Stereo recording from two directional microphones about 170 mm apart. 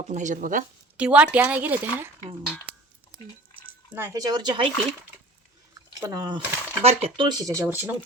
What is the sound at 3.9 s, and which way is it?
Speech, 10° right (ahead or behind).